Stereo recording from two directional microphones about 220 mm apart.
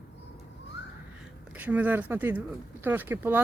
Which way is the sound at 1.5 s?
5° right (ahead or behind).